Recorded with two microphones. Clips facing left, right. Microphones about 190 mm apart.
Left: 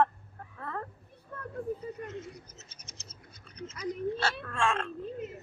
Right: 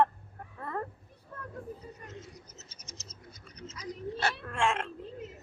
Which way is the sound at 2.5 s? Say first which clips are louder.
Right 2 dB; 60° left (ahead or behind).